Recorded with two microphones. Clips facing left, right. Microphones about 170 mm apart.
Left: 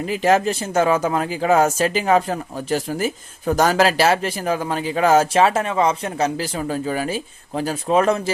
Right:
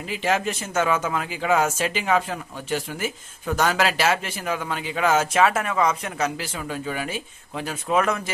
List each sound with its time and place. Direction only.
0.0 s a man's voice: 45° left (ahead or behind)